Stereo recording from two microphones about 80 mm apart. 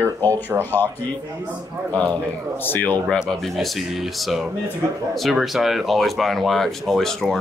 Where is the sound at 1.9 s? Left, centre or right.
Centre.